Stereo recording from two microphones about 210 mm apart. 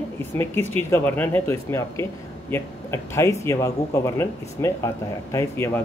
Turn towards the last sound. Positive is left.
turn(degrees=10)  # may be behind; listen again after turning